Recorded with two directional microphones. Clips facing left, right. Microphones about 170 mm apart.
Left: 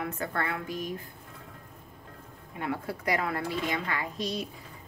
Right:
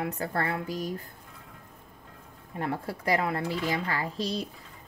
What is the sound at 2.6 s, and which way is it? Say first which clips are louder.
A woman's voice: right 1 dB; 35° right (ahead or behind).